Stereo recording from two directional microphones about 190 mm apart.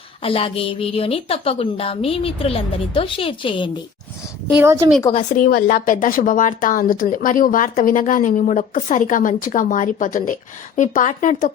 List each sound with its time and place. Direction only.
0.2 s a woman's voice: 30° left (ahead or behind)
4.5 s a woman's voice: 15° right (ahead or behind)
5.1 s speech: 45° left (ahead or behind)